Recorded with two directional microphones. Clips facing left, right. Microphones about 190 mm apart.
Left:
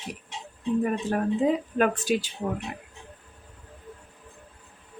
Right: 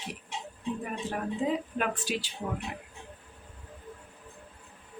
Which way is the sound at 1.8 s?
45° left (ahead or behind).